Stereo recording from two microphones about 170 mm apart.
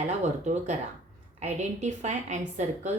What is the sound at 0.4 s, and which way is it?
A woman's voice, 45° right (ahead or behind).